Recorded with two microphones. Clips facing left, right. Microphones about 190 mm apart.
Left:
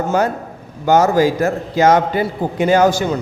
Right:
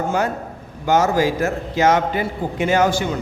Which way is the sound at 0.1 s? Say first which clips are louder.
Left 4 dB; 40° left (ahead or behind).